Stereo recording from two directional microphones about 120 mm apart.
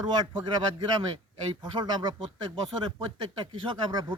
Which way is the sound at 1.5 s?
40° right (ahead or behind).